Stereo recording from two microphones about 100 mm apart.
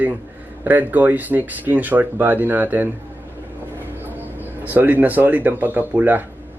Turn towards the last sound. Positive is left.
turn(degrees=-15)  # may be behind; listen again after turning